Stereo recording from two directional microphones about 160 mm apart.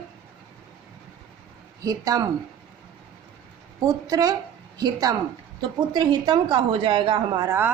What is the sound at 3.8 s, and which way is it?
A woman's voice, 20° right (ahead or behind).